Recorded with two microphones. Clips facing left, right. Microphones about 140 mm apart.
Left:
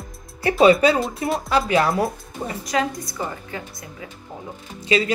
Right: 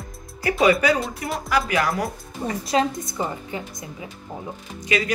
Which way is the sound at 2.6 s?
25° right (ahead or behind).